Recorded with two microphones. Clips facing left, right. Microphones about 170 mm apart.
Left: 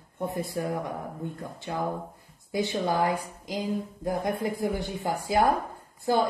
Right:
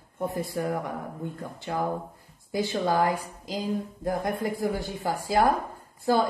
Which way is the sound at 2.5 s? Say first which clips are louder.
Right 1 dB; 20° left (ahead or behind).